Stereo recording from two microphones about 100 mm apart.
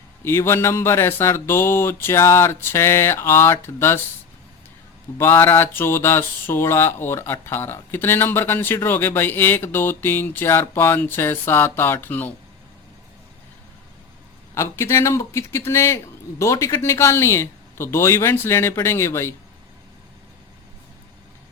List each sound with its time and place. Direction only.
0.3 s speech: 25° left (ahead or behind)
5.1 s speech: 25° left (ahead or behind)
14.5 s speech: 25° left (ahead or behind)